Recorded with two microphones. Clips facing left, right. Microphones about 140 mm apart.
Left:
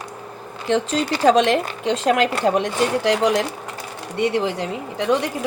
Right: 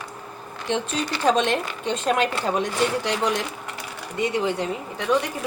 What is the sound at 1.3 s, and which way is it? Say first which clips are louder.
A woman's voice: left 5 dB; 90° left.